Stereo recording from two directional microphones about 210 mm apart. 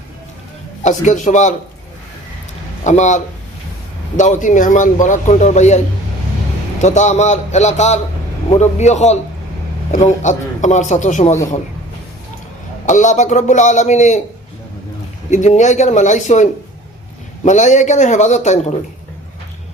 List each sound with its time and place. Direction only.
0.8 s speech: 35° left (ahead or behind)
2.8 s speech: 35° left (ahead or behind)
4.2 s speech: 35° left (ahead or behind)
6.8 s speech: 35° left (ahead or behind)
12.8 s speech: 35° left (ahead or behind)
15.3 s speech: 35° left (ahead or behind)